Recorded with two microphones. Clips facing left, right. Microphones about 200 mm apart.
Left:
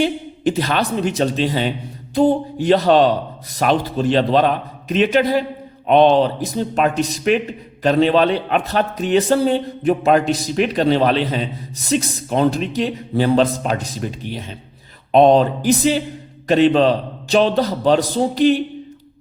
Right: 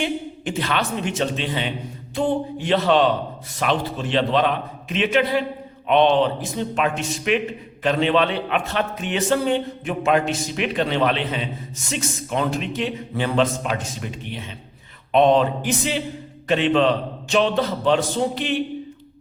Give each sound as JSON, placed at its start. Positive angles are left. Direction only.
{"t": 0.0, "sound": "a man's voice", "side_deg": 35}